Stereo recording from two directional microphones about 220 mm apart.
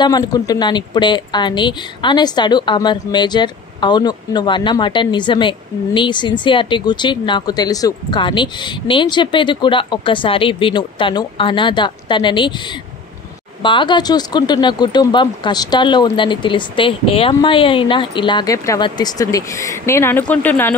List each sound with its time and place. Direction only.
0.0 s a woman's voice: 20° left (ahead or behind)
13.6 s a woman's voice: 20° left (ahead or behind)